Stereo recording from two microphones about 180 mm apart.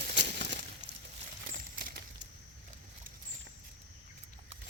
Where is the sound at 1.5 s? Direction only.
50° right (ahead or behind).